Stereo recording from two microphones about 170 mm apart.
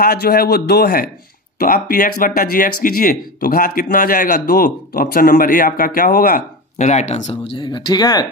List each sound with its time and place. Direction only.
0.0 s speech: 65° left (ahead or behind)
6.8 s speech: 45° left (ahead or behind)
7.5 s speech: 30° left (ahead or behind)